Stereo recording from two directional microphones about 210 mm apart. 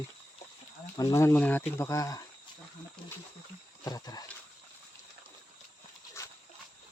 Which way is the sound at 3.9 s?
20° left (ahead or behind).